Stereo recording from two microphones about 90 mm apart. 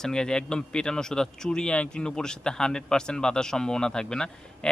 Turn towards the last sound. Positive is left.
turn(degrees=10)  # may be behind; listen again after turning